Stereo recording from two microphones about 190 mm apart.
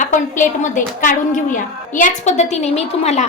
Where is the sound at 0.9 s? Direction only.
45° left (ahead or behind).